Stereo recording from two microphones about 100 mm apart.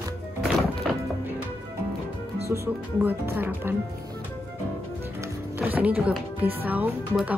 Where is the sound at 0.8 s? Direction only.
5° left (ahead or behind).